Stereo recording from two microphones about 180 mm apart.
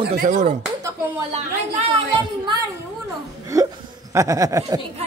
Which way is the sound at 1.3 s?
30° right (ahead or behind).